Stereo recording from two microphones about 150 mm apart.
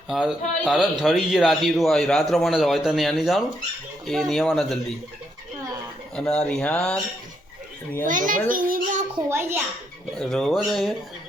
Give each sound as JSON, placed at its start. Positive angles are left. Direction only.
{"t": 0.1, "sound": "a man's voice", "side_deg": -5}
{"t": 6.1, "sound": "a man's voice", "side_deg": 5}
{"t": 8.0, "sound": "a child's voice", "side_deg": -60}
{"t": 8.4, "sound": "child singing", "side_deg": -70}
{"t": 9.3, "sound": "a child's voice", "side_deg": -15}
{"t": 10.2, "sound": "a man's voice", "side_deg": 5}